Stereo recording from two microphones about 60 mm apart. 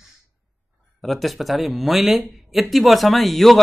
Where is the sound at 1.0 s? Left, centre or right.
Centre.